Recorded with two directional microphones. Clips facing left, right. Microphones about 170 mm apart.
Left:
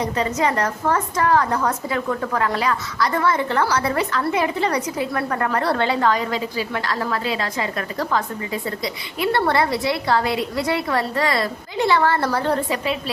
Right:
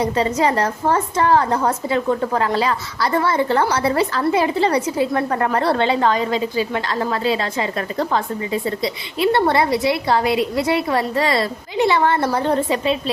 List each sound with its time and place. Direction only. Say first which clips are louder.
0.0 s a woman's voice: right 3 dB; 30° right (ahead or behind)